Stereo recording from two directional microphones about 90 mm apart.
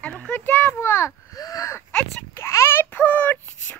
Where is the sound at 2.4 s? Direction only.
30° left (ahead or behind).